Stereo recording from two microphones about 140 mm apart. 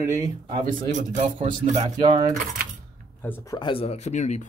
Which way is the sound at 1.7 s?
35° right (ahead or behind).